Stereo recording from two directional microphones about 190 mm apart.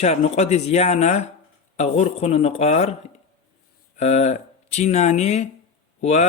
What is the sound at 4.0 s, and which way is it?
Speech, 35° left (ahead or behind).